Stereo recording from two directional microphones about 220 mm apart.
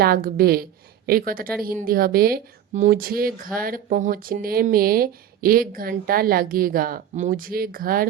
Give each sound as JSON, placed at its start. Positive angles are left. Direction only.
{"t": 0.0, "sound": "a woman's voice", "side_deg": -40}